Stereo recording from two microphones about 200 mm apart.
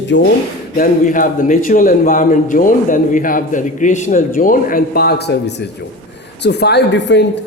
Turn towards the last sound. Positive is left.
turn(degrees=60)  # may be behind; listen again after turning